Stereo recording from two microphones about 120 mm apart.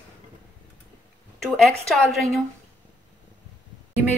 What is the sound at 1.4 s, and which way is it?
Speech, 5° left (ahead or behind).